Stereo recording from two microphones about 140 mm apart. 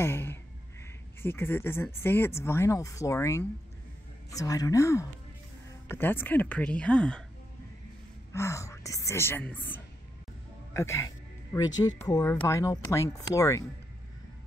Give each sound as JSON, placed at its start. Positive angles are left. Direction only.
{"t": 0.0, "sound": "a sound", "side_deg": 15}
{"t": 1.2, "sound": "speech", "side_deg": 15}
{"t": 8.3, "sound": "speech", "side_deg": 20}